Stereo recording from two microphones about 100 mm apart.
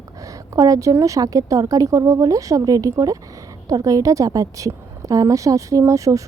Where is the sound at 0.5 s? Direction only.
35° right (ahead or behind).